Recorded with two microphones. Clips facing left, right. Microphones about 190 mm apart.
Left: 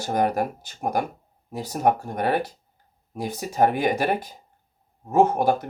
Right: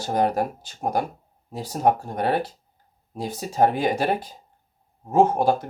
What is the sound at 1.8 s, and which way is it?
Speech, 50° left (ahead or behind).